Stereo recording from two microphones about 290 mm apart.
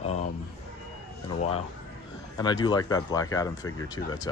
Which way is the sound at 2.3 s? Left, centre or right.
Centre.